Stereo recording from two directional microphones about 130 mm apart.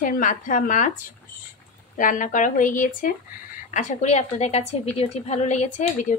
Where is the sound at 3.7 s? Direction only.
65° left (ahead or behind).